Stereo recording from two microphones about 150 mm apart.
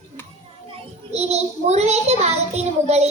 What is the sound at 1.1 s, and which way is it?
A child's voice, 45° right (ahead or behind).